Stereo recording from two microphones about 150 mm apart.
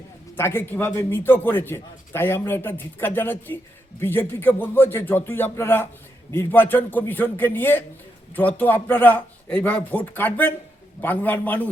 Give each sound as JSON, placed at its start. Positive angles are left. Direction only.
{"t": 0.3, "sound": "a man's voice", "side_deg": 15}